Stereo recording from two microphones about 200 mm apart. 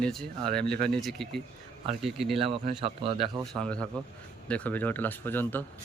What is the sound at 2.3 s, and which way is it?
Speech, 30° right (ahead or behind).